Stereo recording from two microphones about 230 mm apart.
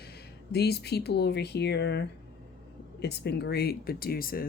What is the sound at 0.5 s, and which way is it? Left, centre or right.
Speech, left.